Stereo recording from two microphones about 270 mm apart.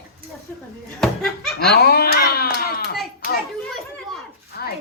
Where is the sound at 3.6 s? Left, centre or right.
Centre.